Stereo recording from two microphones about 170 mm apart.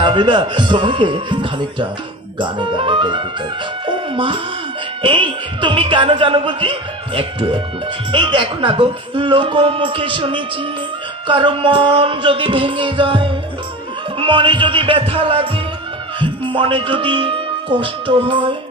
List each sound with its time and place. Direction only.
0.0 s speech: 30° right (ahead or behind)
3.8 s music: 30° right (ahead or behind)
8.1 s speech: 30° right (ahead or behind)
11.3 s music: 30° right (ahead or behind)
16.2 s speech: 30° right (ahead or behind)